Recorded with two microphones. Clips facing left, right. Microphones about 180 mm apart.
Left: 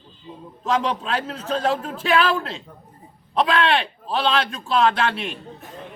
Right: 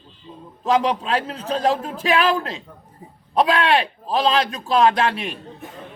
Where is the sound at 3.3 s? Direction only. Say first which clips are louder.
Right 2 dB; 40° right (ahead or behind).